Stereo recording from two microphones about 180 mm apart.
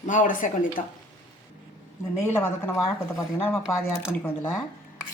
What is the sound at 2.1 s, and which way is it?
Speech, 10° left (ahead or behind).